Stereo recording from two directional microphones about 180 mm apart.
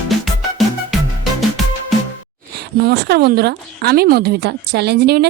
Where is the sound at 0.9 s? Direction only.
Centre (ahead or behind).